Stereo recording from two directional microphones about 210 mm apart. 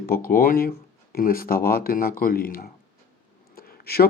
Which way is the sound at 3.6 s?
45° left (ahead or behind).